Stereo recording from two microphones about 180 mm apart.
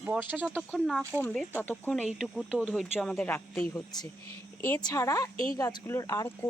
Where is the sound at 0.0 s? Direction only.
10° right (ahead or behind).